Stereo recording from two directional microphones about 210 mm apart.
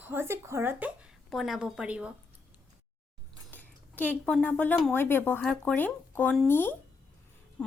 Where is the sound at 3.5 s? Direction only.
10° left (ahead or behind).